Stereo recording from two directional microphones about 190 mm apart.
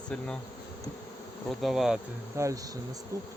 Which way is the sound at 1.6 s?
Centre (ahead or behind).